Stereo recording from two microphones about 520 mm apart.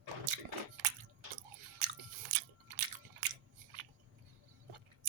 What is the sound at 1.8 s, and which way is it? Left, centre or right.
Biting, right.